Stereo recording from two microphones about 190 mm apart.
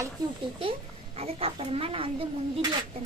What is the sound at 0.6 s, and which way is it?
A woman's voice, 30° right (ahead or behind).